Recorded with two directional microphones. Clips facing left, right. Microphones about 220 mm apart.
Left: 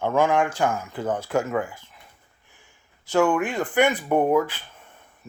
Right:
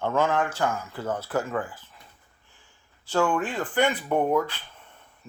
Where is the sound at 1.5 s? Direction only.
20° left (ahead or behind).